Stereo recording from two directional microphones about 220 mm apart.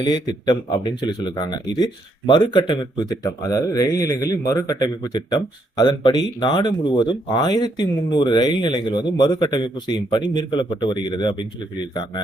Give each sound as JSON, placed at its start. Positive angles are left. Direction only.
{"t": 0.0, "sound": "speech", "side_deg": 20}